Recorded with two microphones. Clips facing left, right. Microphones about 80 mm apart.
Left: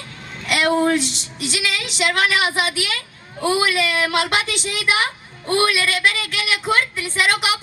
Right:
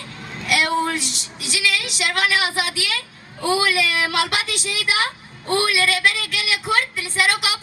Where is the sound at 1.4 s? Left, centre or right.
Left.